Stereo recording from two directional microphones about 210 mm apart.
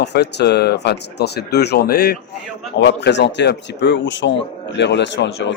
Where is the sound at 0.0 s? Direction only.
55° left (ahead or behind).